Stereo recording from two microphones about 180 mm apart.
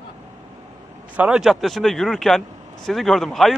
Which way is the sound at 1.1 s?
5° right (ahead or behind).